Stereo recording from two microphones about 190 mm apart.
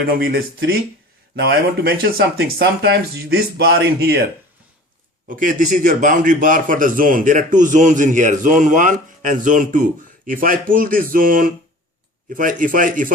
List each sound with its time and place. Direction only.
0.1 s a man's voice: 55° right (ahead or behind)
5.3 s a man's voice: 45° right (ahead or behind)